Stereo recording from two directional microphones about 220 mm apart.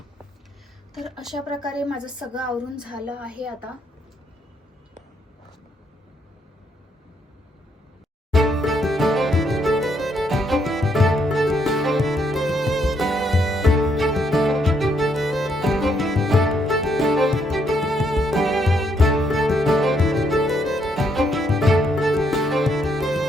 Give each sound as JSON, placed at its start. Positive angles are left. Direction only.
{"t": 0.9, "sound": "a woman's voice", "side_deg": 0}
{"t": 8.3, "sound": "music", "side_deg": 0}